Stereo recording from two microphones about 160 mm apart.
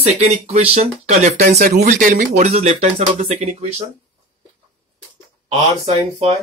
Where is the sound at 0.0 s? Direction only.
40° right (ahead or behind).